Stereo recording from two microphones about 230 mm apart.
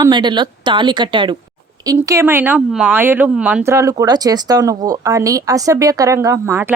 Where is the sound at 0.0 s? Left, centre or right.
Centre.